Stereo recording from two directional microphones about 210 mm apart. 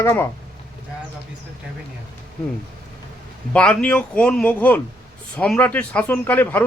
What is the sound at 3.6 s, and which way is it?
Speech, 5° left (ahead or behind).